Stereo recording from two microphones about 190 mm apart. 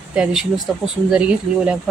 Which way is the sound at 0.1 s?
5° right (ahead or behind).